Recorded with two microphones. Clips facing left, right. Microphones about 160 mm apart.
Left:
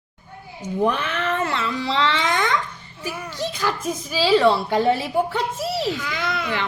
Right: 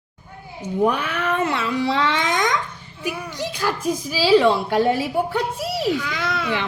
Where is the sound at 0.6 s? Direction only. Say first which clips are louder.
Right 1 dB; 10° right (ahead or behind).